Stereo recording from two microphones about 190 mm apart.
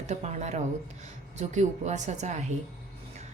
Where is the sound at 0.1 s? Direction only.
35° right (ahead or behind).